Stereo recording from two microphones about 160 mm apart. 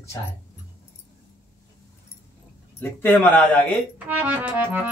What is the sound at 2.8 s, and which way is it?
Speech, 10° left (ahead or behind).